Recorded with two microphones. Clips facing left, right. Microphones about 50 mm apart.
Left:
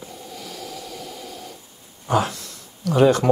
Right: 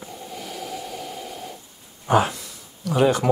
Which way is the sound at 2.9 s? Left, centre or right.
Centre.